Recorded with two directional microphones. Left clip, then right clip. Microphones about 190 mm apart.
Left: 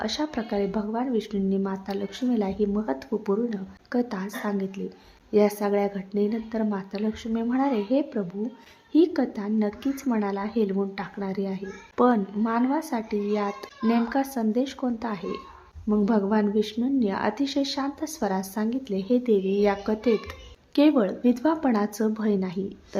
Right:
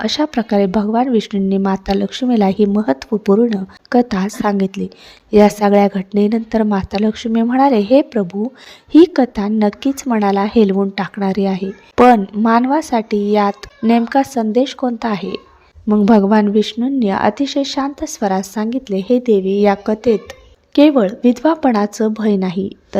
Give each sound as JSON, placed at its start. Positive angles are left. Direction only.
{"t": 0.0, "sound": "a woman's voice", "side_deg": -40}